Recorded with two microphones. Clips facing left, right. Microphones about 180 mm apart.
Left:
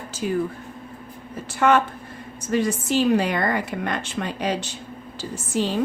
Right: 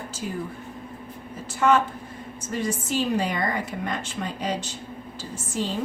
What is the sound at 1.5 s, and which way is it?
A woman's voice, 65° left (ahead or behind).